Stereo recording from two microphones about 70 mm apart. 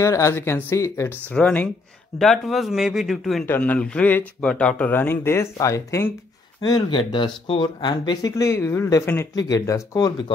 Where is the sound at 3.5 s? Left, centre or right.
Left.